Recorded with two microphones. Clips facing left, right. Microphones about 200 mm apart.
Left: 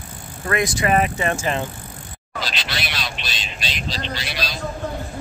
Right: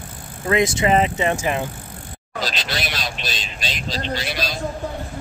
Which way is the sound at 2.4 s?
45° right (ahead or behind).